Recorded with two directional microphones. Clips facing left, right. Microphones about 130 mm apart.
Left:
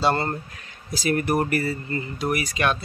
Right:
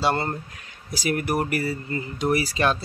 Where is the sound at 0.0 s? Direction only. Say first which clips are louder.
Left 1 dB; 10° right (ahead or behind).